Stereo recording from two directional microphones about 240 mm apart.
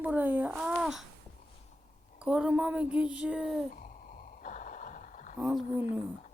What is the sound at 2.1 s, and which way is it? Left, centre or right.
Speech, centre.